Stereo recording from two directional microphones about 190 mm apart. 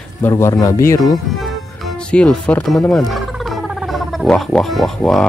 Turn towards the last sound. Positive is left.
turn(degrees=5)  # may be behind; listen again after turning